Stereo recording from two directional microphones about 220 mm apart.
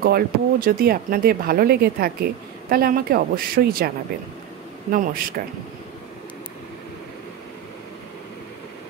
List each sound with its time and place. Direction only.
0.0 s speech: 40° right (ahead or behind)
4.9 s speech: 40° right (ahead or behind)